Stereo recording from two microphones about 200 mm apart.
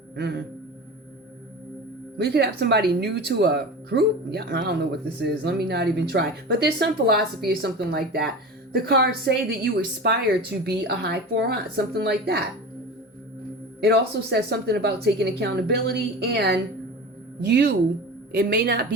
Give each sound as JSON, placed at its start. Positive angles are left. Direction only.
{"t": 0.2, "sound": "a woman's voice", "side_deg": -60}
{"t": 2.1, "sound": "speech", "side_deg": -55}
{"t": 13.8, "sound": "a woman's voice", "side_deg": -55}